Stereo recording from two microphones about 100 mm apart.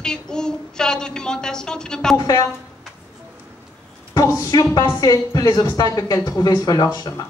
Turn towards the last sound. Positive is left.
turn(degrees=40)  # may be behind; listen again after turning